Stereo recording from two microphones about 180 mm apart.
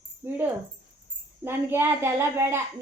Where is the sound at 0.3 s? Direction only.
10° right (ahead or behind).